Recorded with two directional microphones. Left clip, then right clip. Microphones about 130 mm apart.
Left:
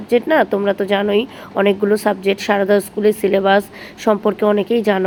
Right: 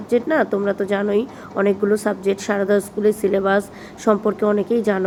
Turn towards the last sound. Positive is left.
turn(degrees=15)  # may be behind; listen again after turning